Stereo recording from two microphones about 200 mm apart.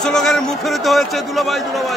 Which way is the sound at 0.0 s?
Centre (ahead or behind).